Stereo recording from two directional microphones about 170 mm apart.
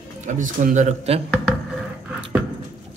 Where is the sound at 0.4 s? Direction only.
45° right (ahead or behind).